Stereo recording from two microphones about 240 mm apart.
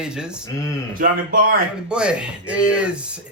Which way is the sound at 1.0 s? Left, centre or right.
Right.